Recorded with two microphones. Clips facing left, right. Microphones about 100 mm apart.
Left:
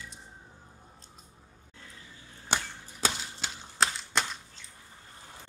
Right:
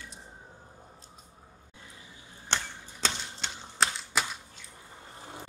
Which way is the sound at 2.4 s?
10° left (ahead or behind).